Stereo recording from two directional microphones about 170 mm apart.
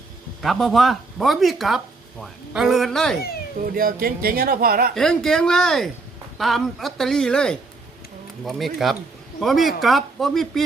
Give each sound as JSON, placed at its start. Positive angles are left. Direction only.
{"t": 0.4, "sound": "speech", "side_deg": 0}
{"t": 3.6, "sound": "speech", "side_deg": -55}
{"t": 4.9, "sound": "speech", "side_deg": 5}